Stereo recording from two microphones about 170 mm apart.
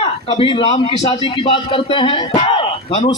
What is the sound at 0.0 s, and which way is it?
A man's voice, 30° left (ahead or behind).